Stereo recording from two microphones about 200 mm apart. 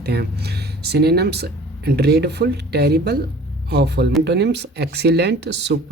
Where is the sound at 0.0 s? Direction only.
55° right (ahead or behind).